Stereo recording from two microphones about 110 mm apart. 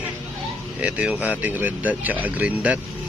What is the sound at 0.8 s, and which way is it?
Speech, 10° right (ahead or behind).